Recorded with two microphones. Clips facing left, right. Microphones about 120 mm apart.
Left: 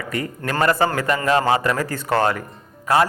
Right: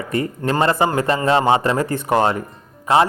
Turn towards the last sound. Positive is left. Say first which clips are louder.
# right 2 dB
turn(degrees=-20)  # may be behind; listen again after turning